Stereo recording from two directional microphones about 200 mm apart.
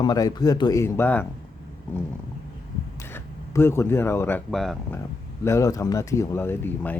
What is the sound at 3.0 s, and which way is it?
Speech, 15° left (ahead or behind).